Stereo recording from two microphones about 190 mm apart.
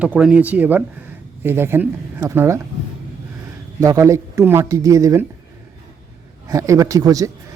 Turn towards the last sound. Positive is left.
turn(degrees=-20)  # may be behind; listen again after turning